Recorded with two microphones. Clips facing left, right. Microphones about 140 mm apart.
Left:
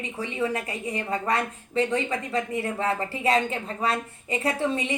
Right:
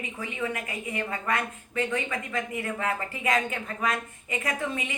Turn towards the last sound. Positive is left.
turn(degrees=30)  # may be behind; listen again after turning